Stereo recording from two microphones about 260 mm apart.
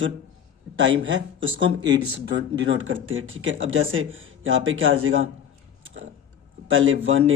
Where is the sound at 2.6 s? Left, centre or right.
Right.